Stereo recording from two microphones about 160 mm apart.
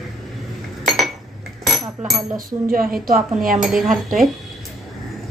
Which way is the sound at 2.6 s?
65° right (ahead or behind).